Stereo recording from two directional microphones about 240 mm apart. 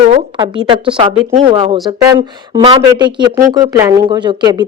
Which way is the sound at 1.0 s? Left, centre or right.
Right.